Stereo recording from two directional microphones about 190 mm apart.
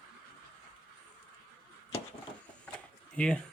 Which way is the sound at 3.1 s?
5° left (ahead or behind).